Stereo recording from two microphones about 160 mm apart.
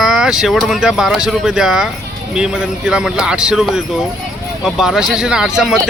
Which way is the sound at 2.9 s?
5° right (ahead or behind).